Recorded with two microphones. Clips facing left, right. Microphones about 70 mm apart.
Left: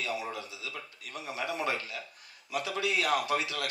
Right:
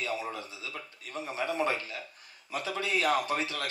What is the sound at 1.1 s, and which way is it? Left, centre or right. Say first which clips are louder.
A man's voice: right 3 dB; right.